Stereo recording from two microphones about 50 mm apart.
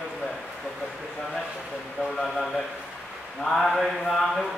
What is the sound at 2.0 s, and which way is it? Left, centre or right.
Speech, left.